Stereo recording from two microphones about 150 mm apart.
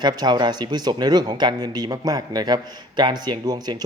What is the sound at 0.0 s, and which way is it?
Speech, 30° right (ahead or behind).